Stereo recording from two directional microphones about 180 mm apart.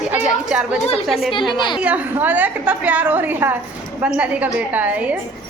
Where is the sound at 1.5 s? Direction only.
25° left (ahead or behind).